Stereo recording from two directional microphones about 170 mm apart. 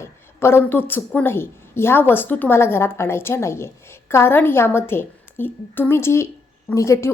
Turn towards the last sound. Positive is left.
turn(degrees=15)  # may be behind; listen again after turning